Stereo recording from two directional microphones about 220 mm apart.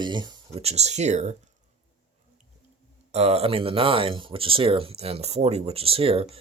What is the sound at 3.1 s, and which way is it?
Speech, 30° right (ahead or behind).